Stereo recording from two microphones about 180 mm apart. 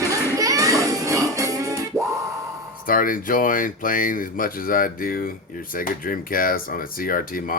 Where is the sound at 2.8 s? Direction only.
50° left (ahead or behind).